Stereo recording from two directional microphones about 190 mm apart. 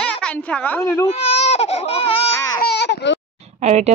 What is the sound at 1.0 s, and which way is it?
Baby cry, 35° left (ahead or behind).